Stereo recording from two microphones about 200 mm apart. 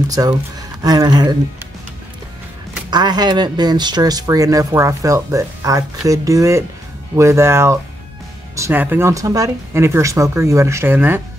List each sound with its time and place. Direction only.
0.1 s speech: 20° right (ahead or behind)
2.9 s speech: 20° right (ahead or behind)